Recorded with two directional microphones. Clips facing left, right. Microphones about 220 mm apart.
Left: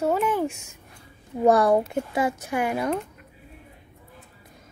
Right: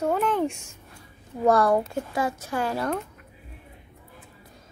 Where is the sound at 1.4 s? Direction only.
20° left (ahead or behind).